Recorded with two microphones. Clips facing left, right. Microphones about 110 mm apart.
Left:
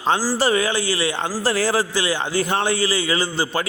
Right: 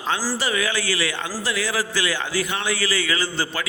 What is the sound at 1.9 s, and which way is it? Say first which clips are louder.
Speech: left 3 dB; 20° left (ahead or behind).